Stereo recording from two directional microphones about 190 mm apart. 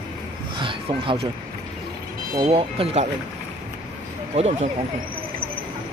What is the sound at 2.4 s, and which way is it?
Speech, 30° right (ahead or behind).